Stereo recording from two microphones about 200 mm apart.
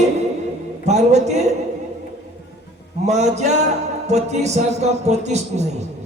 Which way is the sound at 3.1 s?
35° right (ahead or behind).